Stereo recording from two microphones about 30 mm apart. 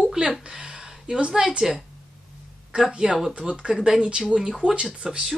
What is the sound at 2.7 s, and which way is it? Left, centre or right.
Speech, right.